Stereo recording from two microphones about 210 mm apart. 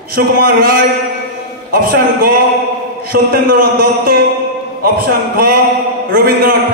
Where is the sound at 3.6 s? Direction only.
45° right (ahead or behind).